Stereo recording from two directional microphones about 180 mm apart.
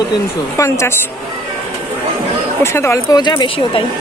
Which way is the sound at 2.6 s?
15° left (ahead or behind).